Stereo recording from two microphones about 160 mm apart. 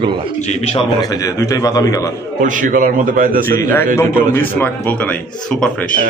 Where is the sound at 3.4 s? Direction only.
15° left (ahead or behind).